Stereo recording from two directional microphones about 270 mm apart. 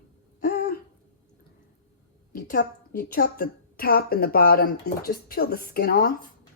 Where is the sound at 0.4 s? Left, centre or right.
Left.